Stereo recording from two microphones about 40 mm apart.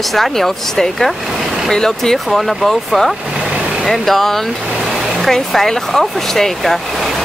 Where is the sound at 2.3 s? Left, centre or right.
Centre.